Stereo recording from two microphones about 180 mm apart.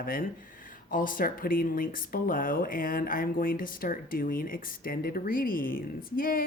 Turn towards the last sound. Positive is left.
turn(degrees=55)  # may be behind; listen again after turning